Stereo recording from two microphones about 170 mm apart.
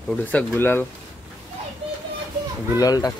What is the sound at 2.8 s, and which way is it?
Speech, 20° left (ahead or behind).